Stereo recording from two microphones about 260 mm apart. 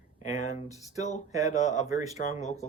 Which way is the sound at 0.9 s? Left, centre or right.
Left.